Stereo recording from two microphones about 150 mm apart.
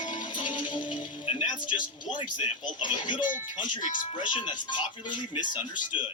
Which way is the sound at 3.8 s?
60° left (ahead or behind).